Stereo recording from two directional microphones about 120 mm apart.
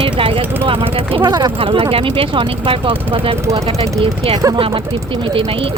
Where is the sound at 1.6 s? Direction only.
45° right (ahead or behind).